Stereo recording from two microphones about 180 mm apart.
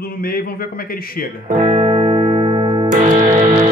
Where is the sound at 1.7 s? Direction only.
35° right (ahead or behind).